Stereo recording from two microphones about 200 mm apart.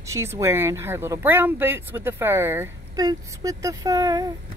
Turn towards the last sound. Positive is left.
turn(degrees=-20)  # may be behind; listen again after turning